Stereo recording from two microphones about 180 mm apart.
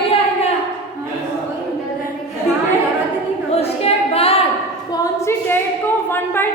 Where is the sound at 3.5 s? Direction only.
35° left (ahead or behind).